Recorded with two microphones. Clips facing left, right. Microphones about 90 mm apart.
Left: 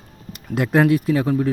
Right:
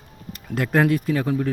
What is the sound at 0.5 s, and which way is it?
Speech, 10° left (ahead or behind).